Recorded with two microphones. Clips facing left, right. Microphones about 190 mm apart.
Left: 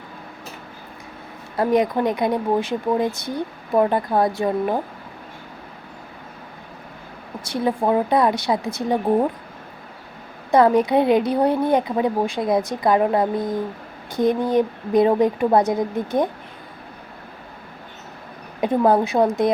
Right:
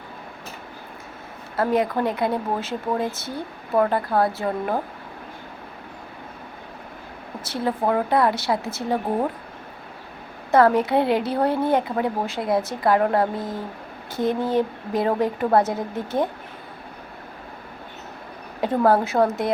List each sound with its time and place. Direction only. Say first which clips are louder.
1.5 s speech: left 3 dB; 15° left (ahead or behind)
7.5 s speech: left 3 dB; 15° left (ahead or behind)
10.5 s speech: left 2 dB; 15° left (ahead or behind)
18.6 s speech: left 2 dB; 15° left (ahead or behind)